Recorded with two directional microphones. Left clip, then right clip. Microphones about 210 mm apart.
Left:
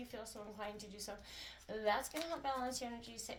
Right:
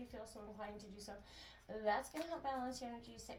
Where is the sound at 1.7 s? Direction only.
35° left (ahead or behind).